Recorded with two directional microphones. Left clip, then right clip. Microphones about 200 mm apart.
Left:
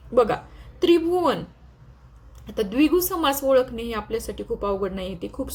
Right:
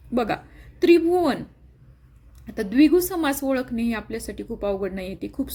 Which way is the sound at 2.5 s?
35° right (ahead or behind).